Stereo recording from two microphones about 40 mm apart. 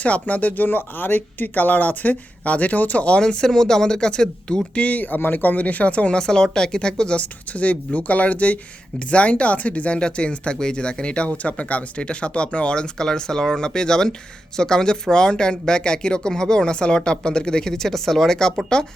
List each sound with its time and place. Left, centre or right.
0.0 s speech: left
3.2 s speech: left
4.9 s speech: left
6.1 s speech: left
7.2 s speech: left; by 18.5 s centre